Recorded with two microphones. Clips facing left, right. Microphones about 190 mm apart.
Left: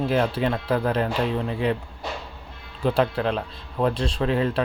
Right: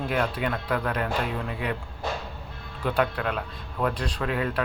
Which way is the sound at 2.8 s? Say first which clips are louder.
Left 4 dB; 30° left (ahead or behind).